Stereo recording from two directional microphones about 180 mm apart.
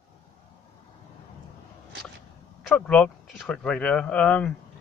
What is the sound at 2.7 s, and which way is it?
Speech, 5° left (ahead or behind).